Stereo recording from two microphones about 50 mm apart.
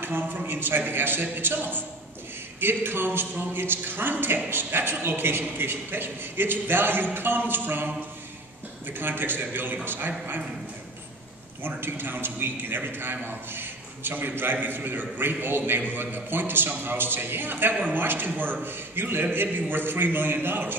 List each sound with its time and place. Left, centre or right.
0.0 s a man's voice: right
11.6 s a man's voice: right